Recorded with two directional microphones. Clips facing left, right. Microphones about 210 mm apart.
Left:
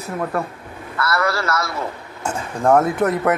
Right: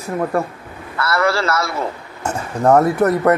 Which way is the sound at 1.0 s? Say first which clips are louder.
Right 3 dB; 25° right (ahead or behind).